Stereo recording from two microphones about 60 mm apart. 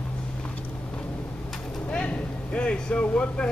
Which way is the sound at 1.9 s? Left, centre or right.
Left.